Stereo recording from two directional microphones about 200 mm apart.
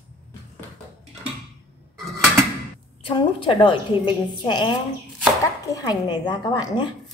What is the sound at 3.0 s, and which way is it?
A woman's voice, 25° left (ahead or behind).